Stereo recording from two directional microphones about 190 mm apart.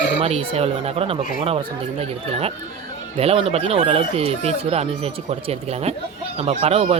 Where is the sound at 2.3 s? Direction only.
30° right (ahead or behind).